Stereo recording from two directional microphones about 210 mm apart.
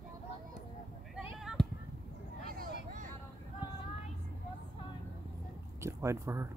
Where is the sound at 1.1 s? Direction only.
Centre (ahead or behind).